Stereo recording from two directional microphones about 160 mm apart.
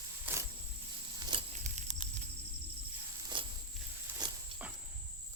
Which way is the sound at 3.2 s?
30° right (ahead or behind).